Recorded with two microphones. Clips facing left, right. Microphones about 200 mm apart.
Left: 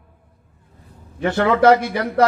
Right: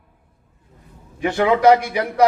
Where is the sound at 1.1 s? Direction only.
15° right (ahead or behind).